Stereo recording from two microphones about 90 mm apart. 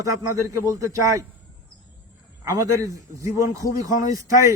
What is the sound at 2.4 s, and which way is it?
A man's voice, 40° right (ahead or behind).